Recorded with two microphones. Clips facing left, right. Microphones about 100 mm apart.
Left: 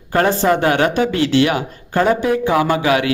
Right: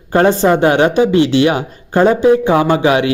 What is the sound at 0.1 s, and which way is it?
A man's voice, 20° right (ahead or behind).